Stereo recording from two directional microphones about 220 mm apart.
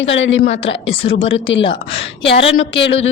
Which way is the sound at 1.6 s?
25° left (ahead or behind).